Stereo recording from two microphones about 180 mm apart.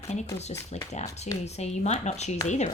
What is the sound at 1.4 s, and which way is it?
Speech, 40° left (ahead or behind).